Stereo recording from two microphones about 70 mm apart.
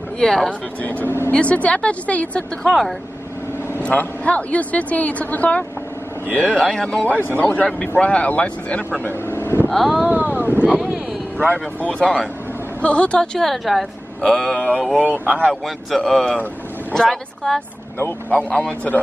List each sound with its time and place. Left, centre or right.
0.2 s a woman's voice: centre
0.5 s a woman's voice: left
2.6 s speech: centre
3.8 s a woman's voice: left
6.5 s a woman's voice: centre
9.0 s speech: left
9.7 s speech: centre
10.0 s speech: right
11.3 s a woman's voice: left; by 14.6 s centre
15.0 s speech: centre
15.6 s a woman's voice: centre
18.3 s a woman's voice: centre